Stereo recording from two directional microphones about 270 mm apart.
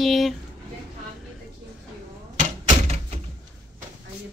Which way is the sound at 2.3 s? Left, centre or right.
Right.